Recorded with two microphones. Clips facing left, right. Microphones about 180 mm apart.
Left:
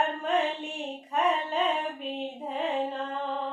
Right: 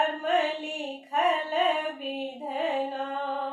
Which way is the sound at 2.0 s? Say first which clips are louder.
Right 1 dB; 5° right (ahead or behind).